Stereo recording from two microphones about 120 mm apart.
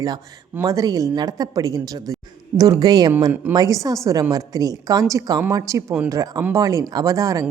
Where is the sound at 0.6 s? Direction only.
30° right (ahead or behind).